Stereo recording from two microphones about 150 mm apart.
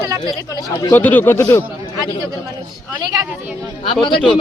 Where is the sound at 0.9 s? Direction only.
10° left (ahead or behind).